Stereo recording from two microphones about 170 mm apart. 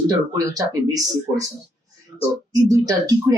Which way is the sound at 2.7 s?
20° right (ahead or behind).